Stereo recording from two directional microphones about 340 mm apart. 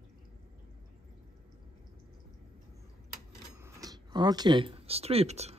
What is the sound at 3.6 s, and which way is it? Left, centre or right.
A man's voice, centre.